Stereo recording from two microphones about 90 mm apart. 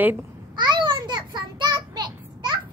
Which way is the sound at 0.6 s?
55° right (ahead or behind).